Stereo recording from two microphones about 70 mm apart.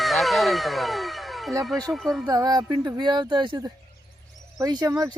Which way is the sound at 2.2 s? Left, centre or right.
Right.